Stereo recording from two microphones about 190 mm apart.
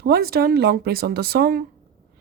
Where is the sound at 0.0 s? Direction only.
55° right (ahead or behind).